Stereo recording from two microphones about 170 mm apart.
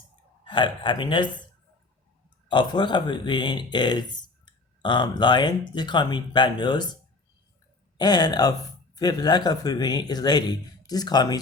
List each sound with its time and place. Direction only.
0.4 s speech: 30° left (ahead or behind)
2.5 s speech: 25° left (ahead or behind)
7.9 s speech: 25° left (ahead or behind)